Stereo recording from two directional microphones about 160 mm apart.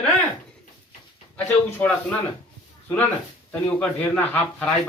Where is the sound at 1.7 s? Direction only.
10° left (ahead or behind).